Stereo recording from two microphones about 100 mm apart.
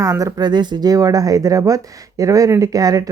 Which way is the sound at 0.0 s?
35° right (ahead or behind).